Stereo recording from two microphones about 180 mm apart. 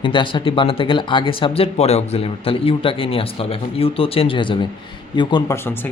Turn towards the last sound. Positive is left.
turn(degrees=15)  # may be behind; listen again after turning